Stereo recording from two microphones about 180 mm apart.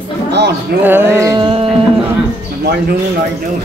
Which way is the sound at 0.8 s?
15° right (ahead or behind).